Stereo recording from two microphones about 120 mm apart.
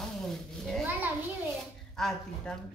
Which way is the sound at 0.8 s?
15° right (ahead or behind).